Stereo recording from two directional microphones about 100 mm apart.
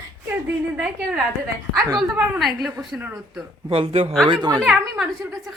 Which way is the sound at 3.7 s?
75° right (ahead or behind).